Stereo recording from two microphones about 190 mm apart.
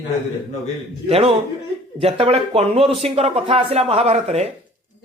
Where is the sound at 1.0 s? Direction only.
30° right (ahead or behind).